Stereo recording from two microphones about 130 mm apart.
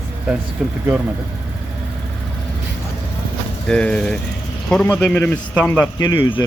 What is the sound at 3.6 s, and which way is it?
A man's voice, 5° left (ahead or behind).